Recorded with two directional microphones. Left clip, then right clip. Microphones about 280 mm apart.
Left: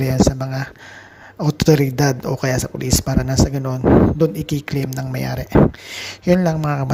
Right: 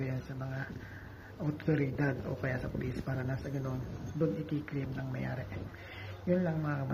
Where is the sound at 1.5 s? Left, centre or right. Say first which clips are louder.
Left 18 dB; left.